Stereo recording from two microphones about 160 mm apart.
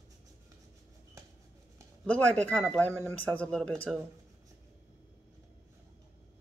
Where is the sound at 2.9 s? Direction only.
20° right (ahead or behind).